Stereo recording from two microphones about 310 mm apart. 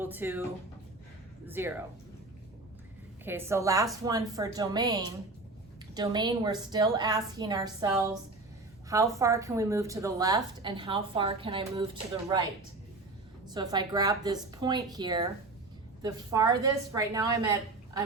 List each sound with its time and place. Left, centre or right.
0.0 s speech: centre
1.5 s speech: centre
3.2 s speech: centre
13.5 s speech: centre